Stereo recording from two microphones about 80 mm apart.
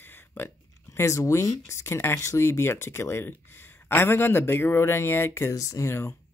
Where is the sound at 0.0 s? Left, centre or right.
Left.